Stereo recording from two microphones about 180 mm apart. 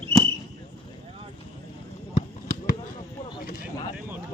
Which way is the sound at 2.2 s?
50° left (ahead or behind).